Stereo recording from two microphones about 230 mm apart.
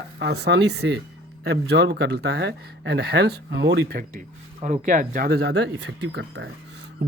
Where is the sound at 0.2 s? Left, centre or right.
Right.